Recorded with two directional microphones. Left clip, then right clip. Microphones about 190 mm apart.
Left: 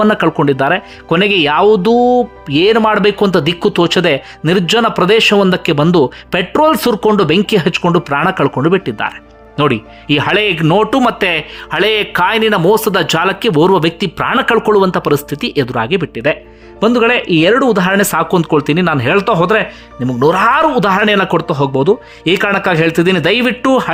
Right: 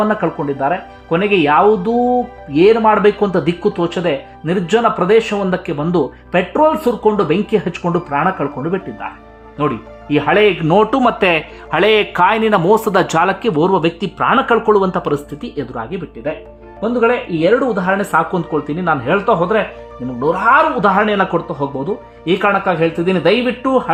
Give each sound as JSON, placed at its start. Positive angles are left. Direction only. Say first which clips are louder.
{"t": 0.1, "sound": "speech", "louder": "left 6 dB", "side_deg": 30}